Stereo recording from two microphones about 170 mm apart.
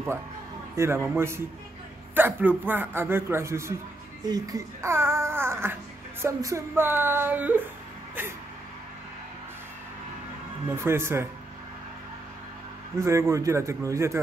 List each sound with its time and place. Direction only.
0.7 s speech: 15° right (ahead or behind)
10.7 s speech: 15° right (ahead or behind)
13.0 s speech: 15° right (ahead or behind)